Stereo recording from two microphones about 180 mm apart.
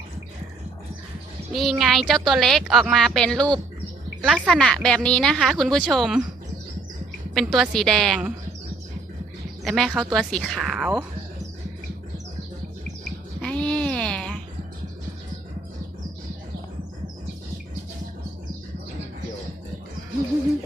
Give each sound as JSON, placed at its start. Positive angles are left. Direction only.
{"t": 1.5, "sound": "a woman's voice", "side_deg": 0}
{"t": 7.3, "sound": "a woman's voice", "side_deg": 0}
{"t": 9.6, "sound": "a woman's voice", "side_deg": 0}
{"t": 13.4, "sound": "a sound", "side_deg": 5}